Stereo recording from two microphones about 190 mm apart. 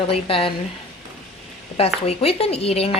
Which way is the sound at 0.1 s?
30° left (ahead or behind).